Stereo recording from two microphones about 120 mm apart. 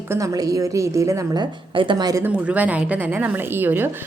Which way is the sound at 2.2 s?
10° right (ahead or behind).